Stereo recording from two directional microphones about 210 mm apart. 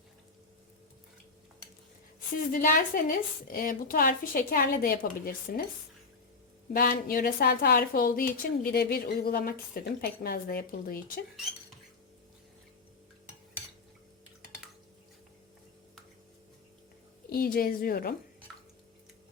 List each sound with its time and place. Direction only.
2.5 s a woman's voice: 40° left (ahead or behind)
6.7 s a woman's voice: 45° left (ahead or behind)
17.2 s a woman's voice: 45° left (ahead or behind)